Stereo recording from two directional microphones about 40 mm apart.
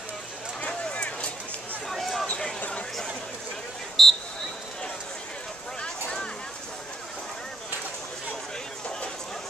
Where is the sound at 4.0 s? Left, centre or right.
Centre.